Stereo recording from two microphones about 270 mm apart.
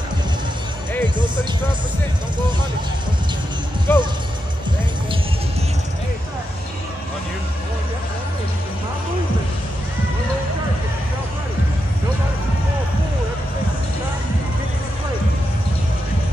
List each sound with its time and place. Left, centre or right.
1.0 s music: centre
3.9 s speech: centre